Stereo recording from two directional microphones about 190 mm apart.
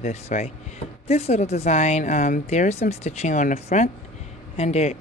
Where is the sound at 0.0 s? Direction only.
35° left (ahead or behind).